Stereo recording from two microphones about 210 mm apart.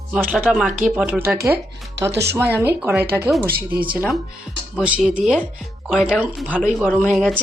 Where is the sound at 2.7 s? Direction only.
10° right (ahead or behind).